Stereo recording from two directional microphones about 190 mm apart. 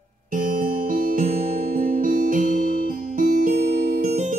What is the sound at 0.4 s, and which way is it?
Music, 45° right (ahead or behind).